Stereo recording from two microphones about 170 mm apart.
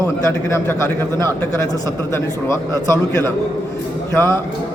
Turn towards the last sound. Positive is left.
turn(degrees=15)  # may be behind; listen again after turning